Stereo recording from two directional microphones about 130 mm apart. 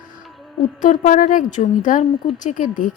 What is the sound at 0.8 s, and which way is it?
A woman's voice, 85° left.